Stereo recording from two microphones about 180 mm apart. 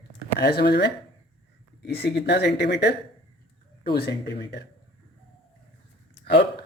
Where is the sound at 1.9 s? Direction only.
65° left (ahead or behind).